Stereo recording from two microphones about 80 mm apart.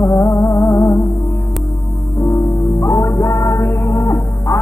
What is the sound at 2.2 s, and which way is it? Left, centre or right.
Music, left.